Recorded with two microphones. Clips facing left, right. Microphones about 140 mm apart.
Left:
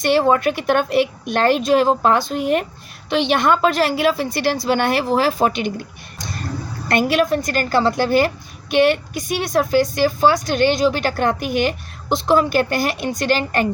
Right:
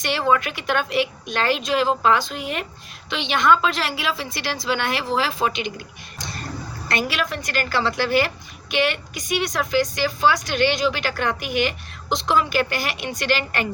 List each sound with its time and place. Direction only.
0.0 s speech: 45° left (ahead or behind)
6.8 s speech: 50° left (ahead or behind)